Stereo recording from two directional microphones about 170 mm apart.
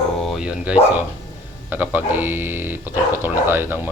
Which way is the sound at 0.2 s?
Centre (ahead or behind).